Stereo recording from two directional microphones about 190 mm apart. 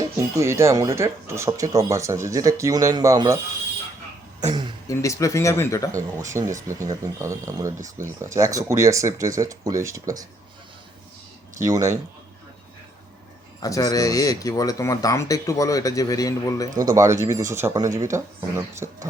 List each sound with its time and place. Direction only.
0.0 s speech: 15° right (ahead or behind)
4.9 s speech: 15° left (ahead or behind)
6.3 s speech: 15° right (ahead or behind)
11.6 s speech: 15° right (ahead or behind)
13.6 s speech: 20° left (ahead or behind)
16.7 s speech: 20° right (ahead or behind)